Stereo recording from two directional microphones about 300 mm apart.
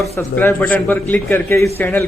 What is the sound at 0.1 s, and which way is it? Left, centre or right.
A man's voice, centre.